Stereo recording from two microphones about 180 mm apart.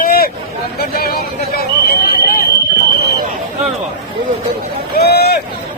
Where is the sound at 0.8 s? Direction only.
55° left (ahead or behind).